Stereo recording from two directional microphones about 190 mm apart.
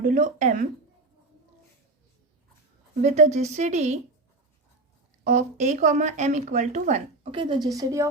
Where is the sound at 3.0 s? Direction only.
35° right (ahead or behind).